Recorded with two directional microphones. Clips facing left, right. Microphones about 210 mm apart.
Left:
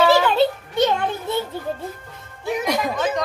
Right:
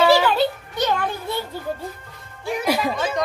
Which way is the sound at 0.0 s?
5° right (ahead or behind).